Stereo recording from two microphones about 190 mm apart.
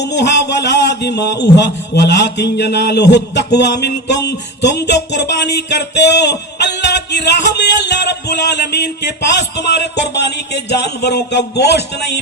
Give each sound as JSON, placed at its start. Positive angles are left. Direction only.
{"t": 0.0, "sound": "a man's voice", "side_deg": 65}